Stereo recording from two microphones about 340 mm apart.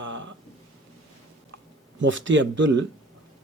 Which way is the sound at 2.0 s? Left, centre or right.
Right.